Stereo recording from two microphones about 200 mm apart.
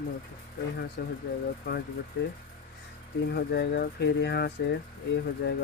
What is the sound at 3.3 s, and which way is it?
Speech, 55° left (ahead or behind).